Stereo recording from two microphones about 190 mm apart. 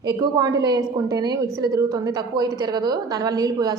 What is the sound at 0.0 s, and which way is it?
A woman's voice, 20° right (ahead or behind).